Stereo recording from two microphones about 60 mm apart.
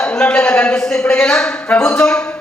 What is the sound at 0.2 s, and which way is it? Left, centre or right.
A woman's voice, left.